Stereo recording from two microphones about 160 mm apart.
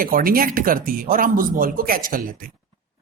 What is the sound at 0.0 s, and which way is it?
A woman's voice, 60° right (ahead or behind).